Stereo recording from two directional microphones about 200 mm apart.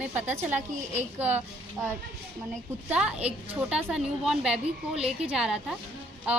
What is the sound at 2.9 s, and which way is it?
Speech, 5° right (ahead or behind).